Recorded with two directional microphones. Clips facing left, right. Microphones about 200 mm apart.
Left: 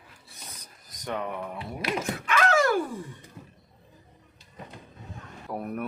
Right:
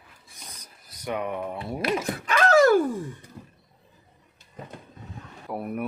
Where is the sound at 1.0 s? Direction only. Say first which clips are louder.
Right 3 dB; 15° right (ahead or behind).